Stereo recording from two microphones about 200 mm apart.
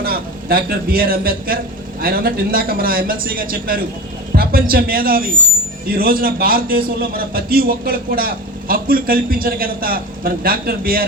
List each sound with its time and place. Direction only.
0.0 s a man's voice: 50° right (ahead or behind)